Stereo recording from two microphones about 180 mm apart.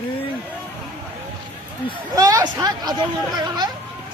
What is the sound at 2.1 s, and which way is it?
Speech, 20° right (ahead or behind).